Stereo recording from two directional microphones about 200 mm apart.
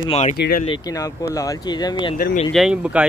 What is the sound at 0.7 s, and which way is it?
Speech, 15° left (ahead or behind).